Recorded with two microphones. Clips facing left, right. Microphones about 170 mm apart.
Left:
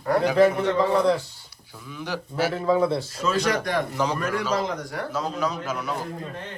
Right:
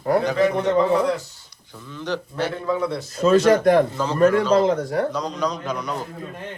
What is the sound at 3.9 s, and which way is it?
Speech, 15° left (ahead or behind).